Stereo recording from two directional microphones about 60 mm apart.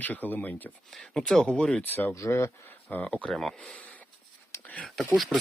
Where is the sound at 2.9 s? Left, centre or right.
Left.